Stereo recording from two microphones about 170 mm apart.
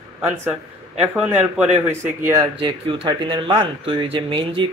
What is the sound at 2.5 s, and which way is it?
Speech, 30° right (ahead or behind).